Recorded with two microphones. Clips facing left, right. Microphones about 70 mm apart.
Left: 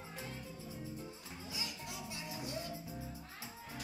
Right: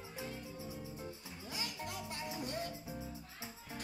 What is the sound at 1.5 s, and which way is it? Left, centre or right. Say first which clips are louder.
Music: right 3 dB; right.